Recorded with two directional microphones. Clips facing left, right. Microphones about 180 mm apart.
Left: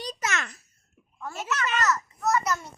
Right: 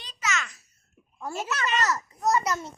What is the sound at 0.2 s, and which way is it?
Babbling, 55° left (ahead or behind).